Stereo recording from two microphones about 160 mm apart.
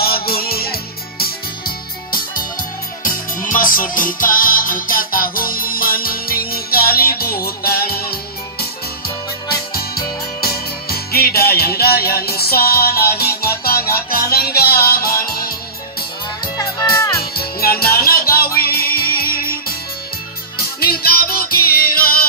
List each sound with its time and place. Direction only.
0.0 s music: 70° left (ahead or behind)
10.4 s music: 70° left (ahead or behind)
16.5 s music: 20° left (ahead or behind)
17.2 s music: 70° left (ahead or behind)
20.5 s music: 70° left (ahead or behind)